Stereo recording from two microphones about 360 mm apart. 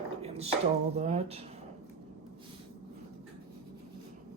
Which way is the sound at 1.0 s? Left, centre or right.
Centre.